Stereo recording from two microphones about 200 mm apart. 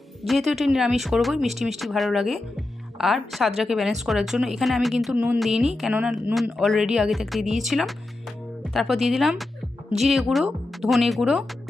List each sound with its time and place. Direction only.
0.2 s speech: centre (ahead or behind)